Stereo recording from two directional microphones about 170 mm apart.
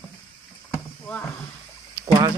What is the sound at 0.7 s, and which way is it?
Rowboat, 10° left (ahead or behind).